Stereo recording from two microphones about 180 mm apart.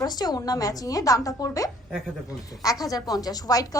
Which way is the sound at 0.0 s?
20° left (ahead or behind).